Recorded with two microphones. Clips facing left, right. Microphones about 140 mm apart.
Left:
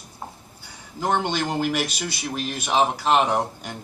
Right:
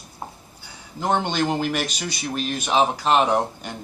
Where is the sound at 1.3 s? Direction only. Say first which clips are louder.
Right 1 dB; 5° left (ahead or behind).